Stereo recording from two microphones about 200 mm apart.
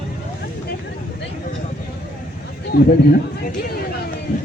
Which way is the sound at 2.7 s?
50° left (ahead or behind).